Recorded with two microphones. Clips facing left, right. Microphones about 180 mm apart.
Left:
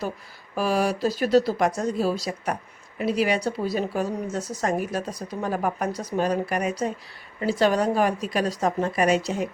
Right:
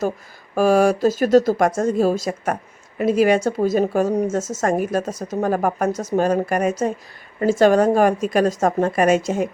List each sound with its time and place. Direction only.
0.5 s speech: 50° right (ahead or behind)